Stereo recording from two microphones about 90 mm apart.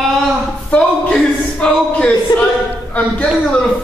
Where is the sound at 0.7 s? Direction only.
10° left (ahead or behind).